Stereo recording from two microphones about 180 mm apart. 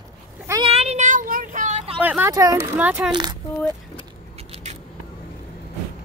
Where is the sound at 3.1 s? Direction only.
25° right (ahead or behind).